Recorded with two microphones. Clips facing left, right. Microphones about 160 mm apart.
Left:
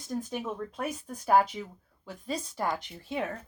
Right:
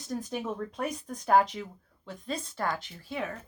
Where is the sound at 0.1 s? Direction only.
5° left (ahead or behind).